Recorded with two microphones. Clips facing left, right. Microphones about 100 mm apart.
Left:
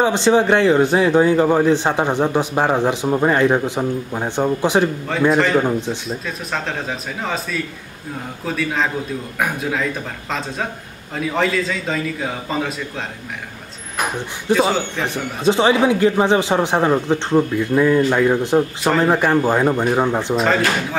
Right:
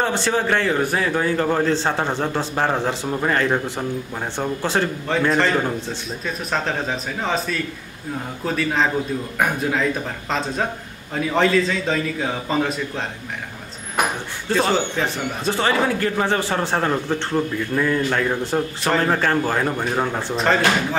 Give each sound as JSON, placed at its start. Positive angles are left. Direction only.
{"t": 0.0, "sound": "a man's voice", "side_deg": 20}
{"t": 6.2, "sound": "a man's voice", "side_deg": 0}
{"t": 11.1, "sound": "a man's voice", "side_deg": 0}
{"t": 14.5, "sound": "a man's voice", "side_deg": 5}
{"t": 15.0, "sound": "a man's voice", "side_deg": 15}
{"t": 20.3, "sound": "a man's voice", "side_deg": 0}